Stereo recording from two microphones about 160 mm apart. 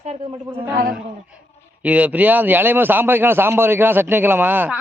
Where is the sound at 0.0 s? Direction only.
40° right (ahead or behind).